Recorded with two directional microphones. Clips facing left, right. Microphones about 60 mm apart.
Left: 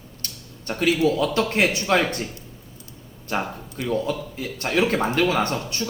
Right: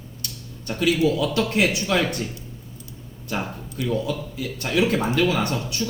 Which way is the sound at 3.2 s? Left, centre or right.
Left.